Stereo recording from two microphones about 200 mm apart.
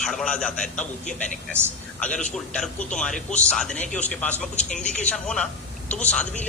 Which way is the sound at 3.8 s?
35° left (ahead or behind).